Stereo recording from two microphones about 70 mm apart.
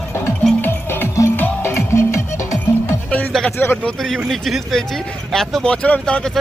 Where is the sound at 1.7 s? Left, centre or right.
Left.